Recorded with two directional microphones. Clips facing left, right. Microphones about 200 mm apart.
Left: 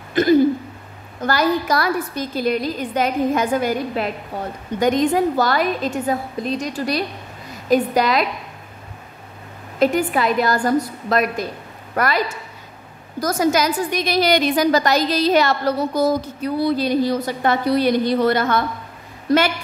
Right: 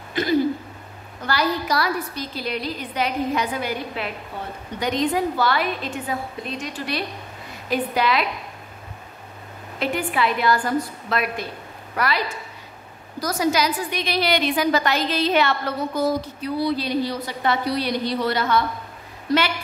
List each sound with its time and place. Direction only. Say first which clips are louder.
0.2 s a woman's voice: left 6 dB; 45° left (ahead or behind)
9.8 s a woman's voice: left 6 dB; 40° left (ahead or behind)
13.2 s a woman's voice: left 3 dB; 50° left (ahead or behind)